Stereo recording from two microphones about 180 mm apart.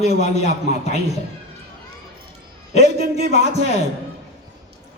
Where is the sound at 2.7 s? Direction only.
35° left (ahead or behind).